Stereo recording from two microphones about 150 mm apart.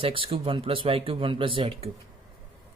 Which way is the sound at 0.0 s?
35° right (ahead or behind).